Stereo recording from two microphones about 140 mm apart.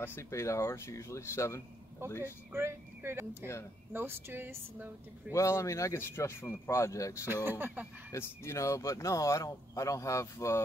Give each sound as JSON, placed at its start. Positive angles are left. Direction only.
{"t": 0.0, "sound": "speech", "side_deg": 20}
{"t": 2.5, "sound": "speech", "side_deg": -15}
{"t": 5.3, "sound": "speech", "side_deg": 20}
{"t": 7.4, "sound": "speech", "side_deg": -15}
{"t": 8.1, "sound": "speech", "side_deg": 20}